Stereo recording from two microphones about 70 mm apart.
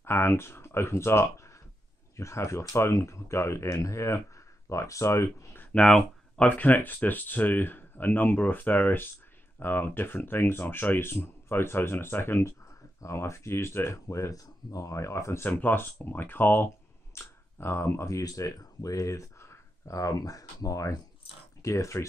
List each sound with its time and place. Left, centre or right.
0.0 s speech: left
5.8 s speech: centre
6.4 s speech: left
15.4 s speech: left